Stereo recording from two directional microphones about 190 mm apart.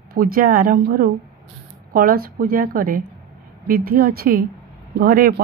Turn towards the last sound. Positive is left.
turn(degrees=-50)  # may be behind; listen again after turning